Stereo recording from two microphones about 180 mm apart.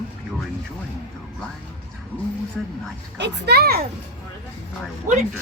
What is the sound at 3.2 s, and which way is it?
Speech, 70° right (ahead or behind).